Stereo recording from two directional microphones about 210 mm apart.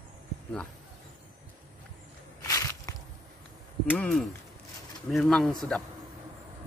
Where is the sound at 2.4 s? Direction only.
15° left (ahead or behind).